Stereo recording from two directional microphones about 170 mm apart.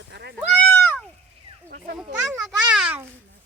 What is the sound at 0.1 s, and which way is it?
Goat, 75° right (ahead or behind).